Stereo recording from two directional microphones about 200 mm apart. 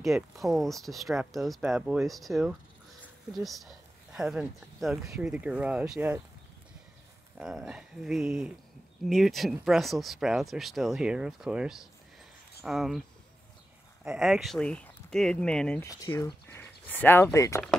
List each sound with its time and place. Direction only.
0.0 s speech: centre (ahead or behind)
7.3 s speech: centre (ahead or behind)
14.1 s speech: centre (ahead or behind)
15.9 s speech: 15° left (ahead or behind)